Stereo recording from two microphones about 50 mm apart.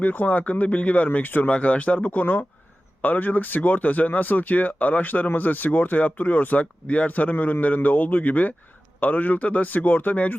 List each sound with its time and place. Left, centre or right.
0.0 s speech: left
1.5 s speech: left